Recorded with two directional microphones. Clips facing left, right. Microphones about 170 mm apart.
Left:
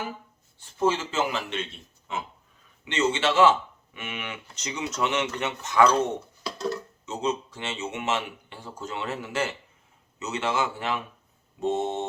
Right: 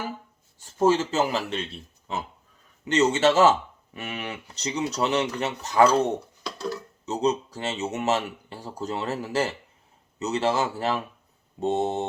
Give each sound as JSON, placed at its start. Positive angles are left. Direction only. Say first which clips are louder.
{"t": 0.6, "sound": "speech", "louder": "right 4 dB", "side_deg": -40}
{"t": 6.4, "sound": "music", "louder": "left 1 dB", "side_deg": 0}
{"t": 7.0, "sound": "speech", "louder": "right 5 dB", "side_deg": -40}